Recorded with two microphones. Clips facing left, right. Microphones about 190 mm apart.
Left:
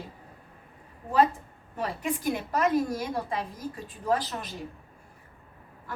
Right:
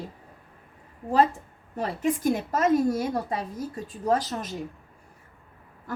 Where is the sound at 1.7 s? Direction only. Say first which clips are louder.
Right 4 dB; 40° right (ahead or behind).